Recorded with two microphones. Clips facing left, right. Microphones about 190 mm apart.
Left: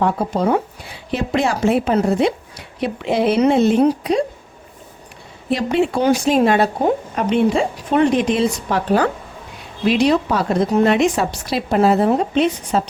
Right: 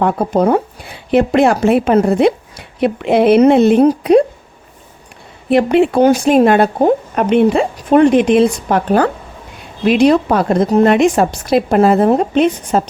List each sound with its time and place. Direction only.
0.0 s speech: 50° right (ahead or behind)
5.5 s a woman's voice: 60° right (ahead or behind)